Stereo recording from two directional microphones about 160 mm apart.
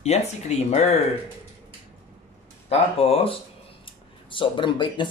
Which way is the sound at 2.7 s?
40° left (ahead or behind).